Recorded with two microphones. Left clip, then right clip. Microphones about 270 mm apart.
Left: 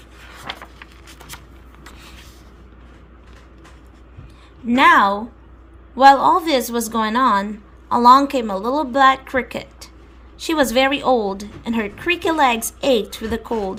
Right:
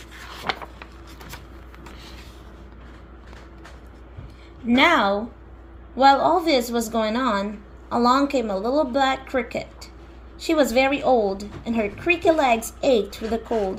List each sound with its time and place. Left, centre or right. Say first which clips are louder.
4.7 s a woman's voice: left 5 dB; centre